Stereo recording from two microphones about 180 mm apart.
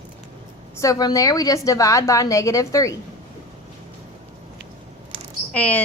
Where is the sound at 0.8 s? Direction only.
20° left (ahead or behind).